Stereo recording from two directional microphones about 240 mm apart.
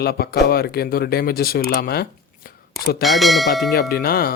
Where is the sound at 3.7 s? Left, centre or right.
Left.